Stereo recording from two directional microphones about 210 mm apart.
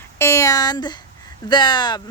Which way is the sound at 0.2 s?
15° left (ahead or behind).